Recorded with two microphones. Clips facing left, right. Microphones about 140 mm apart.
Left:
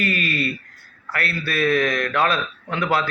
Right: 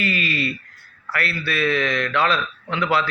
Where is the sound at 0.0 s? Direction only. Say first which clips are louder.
Left 1 dB; 50° left (ahead or behind).